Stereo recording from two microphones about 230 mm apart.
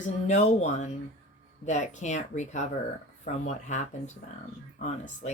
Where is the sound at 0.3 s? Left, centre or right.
Left.